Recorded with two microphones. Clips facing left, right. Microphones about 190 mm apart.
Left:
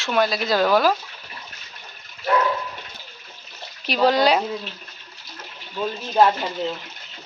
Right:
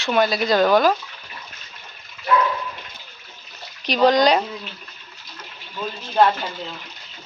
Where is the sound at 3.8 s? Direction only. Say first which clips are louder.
Right 2 dB; 5° left (ahead or behind).